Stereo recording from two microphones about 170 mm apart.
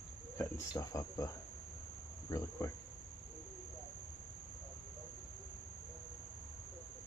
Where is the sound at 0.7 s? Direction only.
20° left (ahead or behind).